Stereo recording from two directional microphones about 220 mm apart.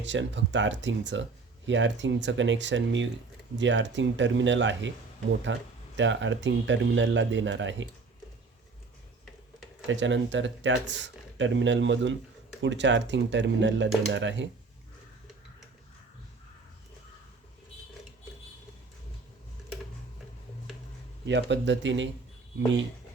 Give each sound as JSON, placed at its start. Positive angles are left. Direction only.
{"t": 0.0, "sound": "speech", "side_deg": -55}
{"t": 9.8, "sound": "speech", "side_deg": -55}
{"t": 21.2, "sound": "speech", "side_deg": -55}